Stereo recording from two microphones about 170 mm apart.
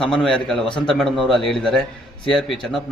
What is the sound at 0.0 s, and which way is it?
Speech, 5° left (ahead or behind).